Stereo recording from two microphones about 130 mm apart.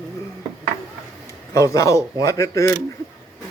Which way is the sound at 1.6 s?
25° left (ahead or behind).